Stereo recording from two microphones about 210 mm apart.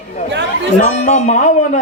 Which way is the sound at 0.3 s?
55° right (ahead or behind).